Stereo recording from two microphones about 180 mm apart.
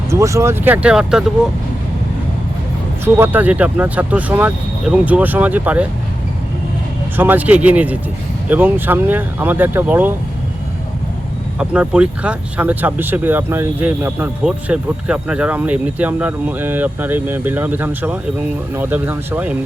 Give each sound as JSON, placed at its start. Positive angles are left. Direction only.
{"t": 0.1, "sound": "speech", "side_deg": -15}
{"t": 3.0, "sound": "speech", "side_deg": -10}
{"t": 7.2, "sound": "speech", "side_deg": -10}
{"t": 11.6, "sound": "speech", "side_deg": -5}